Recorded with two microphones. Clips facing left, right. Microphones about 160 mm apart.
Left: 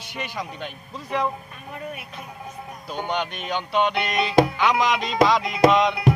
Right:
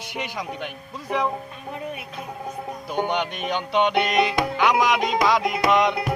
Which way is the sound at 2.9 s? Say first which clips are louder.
Right 3 dB; 15° right (ahead or behind).